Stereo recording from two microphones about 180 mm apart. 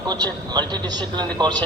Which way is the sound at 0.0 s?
25° right (ahead or behind).